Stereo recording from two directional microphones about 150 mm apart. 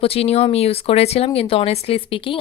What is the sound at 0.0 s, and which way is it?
A woman's voice, 40° left (ahead or behind).